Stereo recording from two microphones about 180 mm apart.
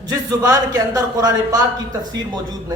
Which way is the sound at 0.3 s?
20° right (ahead or behind).